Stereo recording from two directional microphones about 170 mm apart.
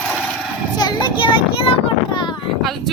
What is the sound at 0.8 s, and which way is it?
Vehicle, 25° left (ahead or behind).